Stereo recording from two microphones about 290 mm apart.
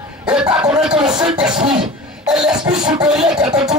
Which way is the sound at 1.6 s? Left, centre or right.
Centre.